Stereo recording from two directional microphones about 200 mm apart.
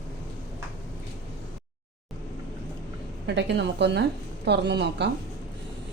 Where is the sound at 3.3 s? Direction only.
60° right (ahead or behind).